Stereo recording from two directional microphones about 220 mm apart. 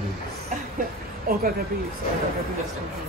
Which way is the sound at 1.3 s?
40° right (ahead or behind).